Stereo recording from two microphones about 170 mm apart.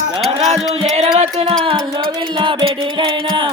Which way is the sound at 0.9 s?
40° right (ahead or behind).